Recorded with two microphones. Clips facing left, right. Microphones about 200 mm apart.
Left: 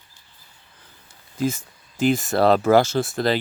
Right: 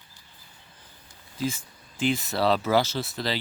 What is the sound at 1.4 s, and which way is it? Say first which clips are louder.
Speech: left 6 dB; 45° left (ahead or behind).